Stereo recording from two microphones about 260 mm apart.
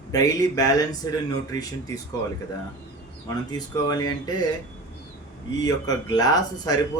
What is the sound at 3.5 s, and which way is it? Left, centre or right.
Speech, centre.